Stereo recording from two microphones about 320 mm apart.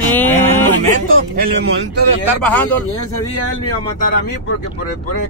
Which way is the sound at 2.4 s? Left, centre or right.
Centre.